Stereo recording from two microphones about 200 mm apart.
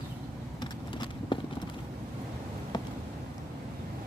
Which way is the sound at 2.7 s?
20° left (ahead or behind).